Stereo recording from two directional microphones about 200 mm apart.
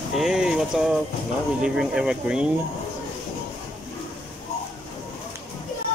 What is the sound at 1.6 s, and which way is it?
Speech, 5° right (ahead or behind).